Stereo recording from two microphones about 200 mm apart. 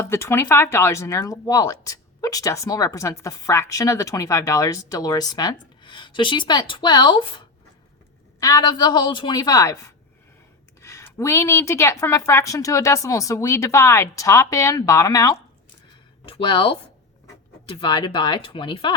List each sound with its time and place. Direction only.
0.0 s a woman's voice: 10° left (ahead or behind)
10.8 s a woman's voice: 15° left (ahead or behind)